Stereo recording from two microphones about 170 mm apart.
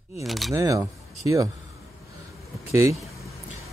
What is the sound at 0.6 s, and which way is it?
Speech, 20° right (ahead or behind).